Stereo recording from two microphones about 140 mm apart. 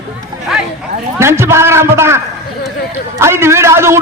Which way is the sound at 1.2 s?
20° right (ahead or behind).